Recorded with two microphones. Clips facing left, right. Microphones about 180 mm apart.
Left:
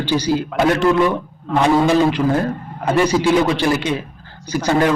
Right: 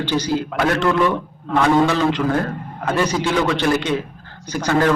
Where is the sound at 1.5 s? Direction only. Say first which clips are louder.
Left 1 dB; centre (ahead or behind).